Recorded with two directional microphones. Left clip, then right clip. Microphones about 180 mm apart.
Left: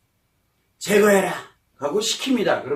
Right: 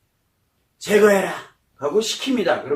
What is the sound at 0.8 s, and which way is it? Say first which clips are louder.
Speech: right 1 dB; 20° left (ahead or behind).